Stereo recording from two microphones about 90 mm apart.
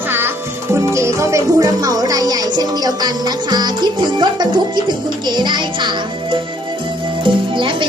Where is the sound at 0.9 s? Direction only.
35° right (ahead or behind); by 5.6 s 55° right (ahead or behind).